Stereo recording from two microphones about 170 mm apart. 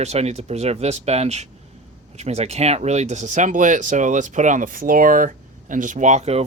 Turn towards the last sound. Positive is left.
turn(degrees=-40)  # may be behind; listen again after turning